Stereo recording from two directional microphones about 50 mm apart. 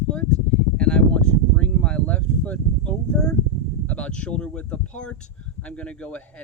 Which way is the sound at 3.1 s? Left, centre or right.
Centre.